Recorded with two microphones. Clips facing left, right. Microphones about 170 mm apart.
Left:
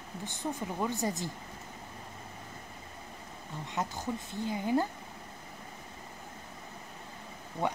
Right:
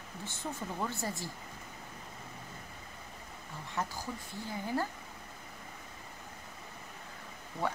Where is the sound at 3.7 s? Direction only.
20° left (ahead or behind).